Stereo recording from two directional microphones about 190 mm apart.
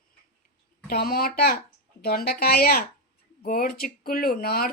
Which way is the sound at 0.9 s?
55° left (ahead or behind).